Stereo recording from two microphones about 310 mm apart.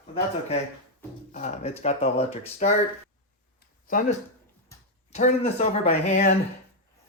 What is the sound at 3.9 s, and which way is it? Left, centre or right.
Speech, left.